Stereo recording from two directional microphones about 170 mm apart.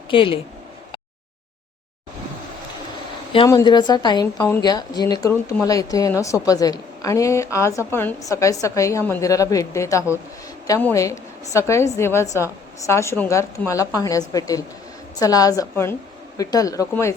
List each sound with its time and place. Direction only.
0.1 s speech: 30° left (ahead or behind)
3.3 s a woman's voice: 25° left (ahead or behind)